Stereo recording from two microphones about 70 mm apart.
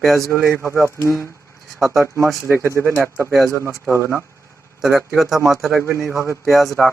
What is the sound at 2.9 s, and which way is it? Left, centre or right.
Speech, right.